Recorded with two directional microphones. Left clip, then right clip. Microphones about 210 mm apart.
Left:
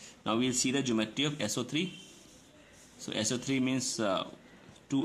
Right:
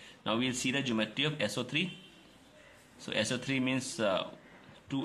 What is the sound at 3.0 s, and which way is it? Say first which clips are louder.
Speech: right 1 dB; 20° left (ahead or behind).